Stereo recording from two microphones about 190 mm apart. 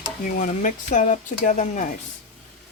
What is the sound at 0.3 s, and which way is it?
Speech, 45° left (ahead or behind).